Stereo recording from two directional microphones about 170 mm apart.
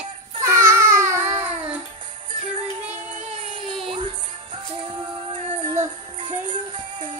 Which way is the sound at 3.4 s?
30° right (ahead or behind).